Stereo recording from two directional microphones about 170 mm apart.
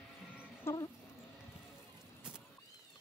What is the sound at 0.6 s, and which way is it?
Music, 20° left (ahead or behind).